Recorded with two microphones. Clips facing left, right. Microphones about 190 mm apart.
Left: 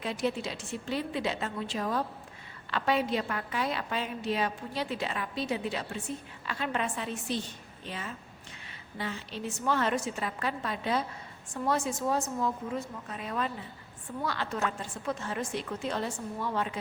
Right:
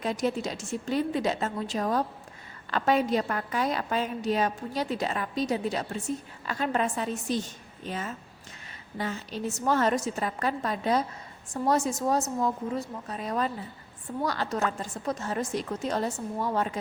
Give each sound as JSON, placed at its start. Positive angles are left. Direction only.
{"t": 0.0, "sound": "a woman's voice", "side_deg": -45}